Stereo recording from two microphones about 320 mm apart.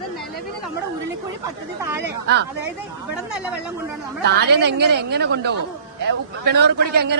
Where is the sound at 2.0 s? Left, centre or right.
Right.